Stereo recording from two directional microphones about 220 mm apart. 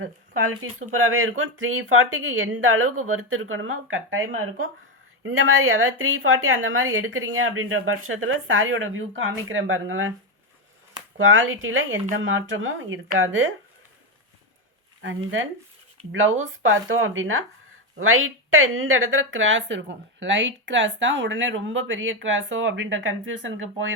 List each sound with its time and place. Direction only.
0.6 s a woman's voice: 70° right (ahead or behind)
11.2 s a woman's voice: 60° right (ahead or behind)
15.0 s a woman's voice: 60° right (ahead or behind)